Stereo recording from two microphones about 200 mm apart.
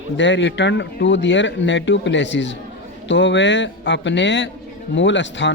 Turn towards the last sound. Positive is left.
turn(degrees=65)  # may be behind; listen again after turning